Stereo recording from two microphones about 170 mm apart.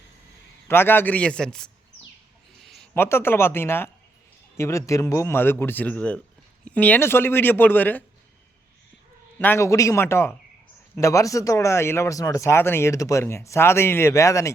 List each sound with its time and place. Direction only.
0.7 s speech: 10° left (ahead or behind)
2.6 s a sound: centre (ahead or behind)
3.0 s speech: 15° left (ahead or behind)
9.4 s speech: 15° left (ahead or behind)